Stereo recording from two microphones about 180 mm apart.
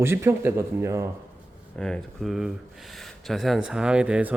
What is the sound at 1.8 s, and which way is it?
Speech, 5° left (ahead or behind).